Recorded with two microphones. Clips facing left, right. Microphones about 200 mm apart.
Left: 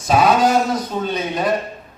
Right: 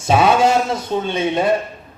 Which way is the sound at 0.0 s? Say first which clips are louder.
Right 1 dB; 25° right (ahead or behind).